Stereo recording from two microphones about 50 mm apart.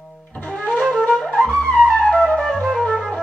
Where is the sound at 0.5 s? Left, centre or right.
Left.